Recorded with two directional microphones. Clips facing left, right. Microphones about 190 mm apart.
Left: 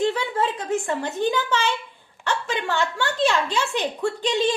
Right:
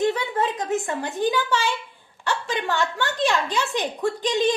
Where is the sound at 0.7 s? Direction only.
15° right (ahead or behind).